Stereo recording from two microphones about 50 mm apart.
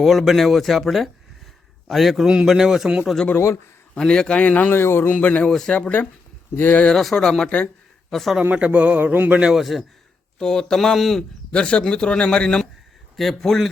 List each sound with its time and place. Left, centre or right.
0.0 s speech: centre
2.2 s a man's voice: centre
3.3 s a man's voice: left
3.9 s speech: centre
4.7 s a man's voice: left
5.1 s speech: left
5.5 s speech: centre
5.7 s speech: left
6.9 s speech: centre
8.5 s a man's voice: right
9.4 s speech: centre
10.3 s speech: centre
11.5 s speech: left
13.1 s speech: centre